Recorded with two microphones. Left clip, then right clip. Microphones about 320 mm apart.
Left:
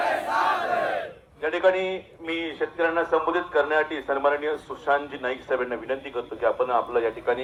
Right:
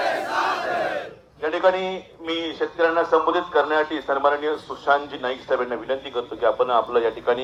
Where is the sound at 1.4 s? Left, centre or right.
Right.